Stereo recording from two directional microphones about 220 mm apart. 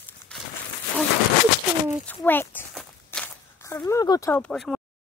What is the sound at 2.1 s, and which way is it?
Speech, 10° left (ahead or behind).